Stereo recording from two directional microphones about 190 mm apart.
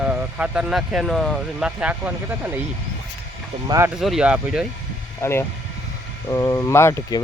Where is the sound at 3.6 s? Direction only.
20° right (ahead or behind).